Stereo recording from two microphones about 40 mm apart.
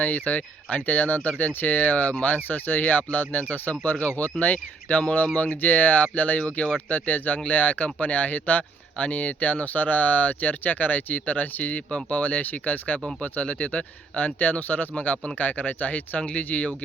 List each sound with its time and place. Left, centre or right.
0.0 s speech: left
11.9 s speech: left
12.1 s speech: left
13.4 s speech: left